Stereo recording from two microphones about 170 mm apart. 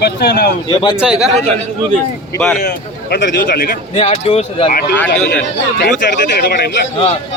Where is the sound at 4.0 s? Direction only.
35° left (ahead or behind).